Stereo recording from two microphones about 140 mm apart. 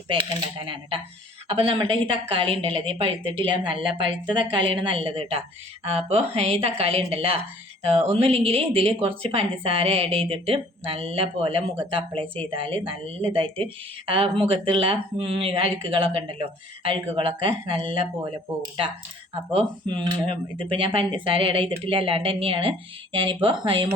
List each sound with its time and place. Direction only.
0.1 s a woman's voice: 35° right (ahead or behind)
19.5 s speech: 35° right (ahead or behind)